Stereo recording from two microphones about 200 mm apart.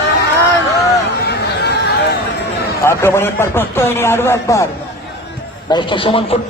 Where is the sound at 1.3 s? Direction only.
55° left (ahead or behind).